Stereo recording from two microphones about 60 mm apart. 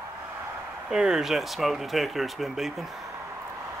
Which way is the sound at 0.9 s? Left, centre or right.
Centre.